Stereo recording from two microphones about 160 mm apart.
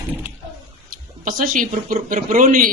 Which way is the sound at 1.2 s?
60° right (ahead or behind).